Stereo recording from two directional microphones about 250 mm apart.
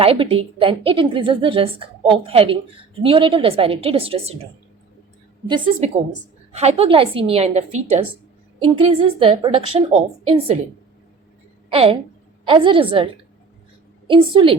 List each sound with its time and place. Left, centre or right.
0.0 s a woman's voice: right
5.5 s a woman's voice: centre
11.7 s a woman's voice: right
14.1 s a woman's voice: centre